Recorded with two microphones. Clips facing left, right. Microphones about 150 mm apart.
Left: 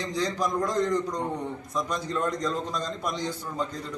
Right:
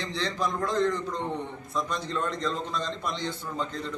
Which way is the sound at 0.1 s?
15° left (ahead or behind).